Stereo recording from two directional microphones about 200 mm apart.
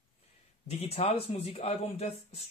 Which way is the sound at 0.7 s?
30° left (ahead or behind).